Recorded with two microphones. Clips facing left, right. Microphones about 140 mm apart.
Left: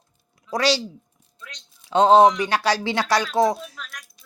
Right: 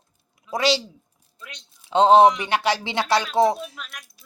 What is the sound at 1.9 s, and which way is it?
Speech, 25° right (ahead or behind).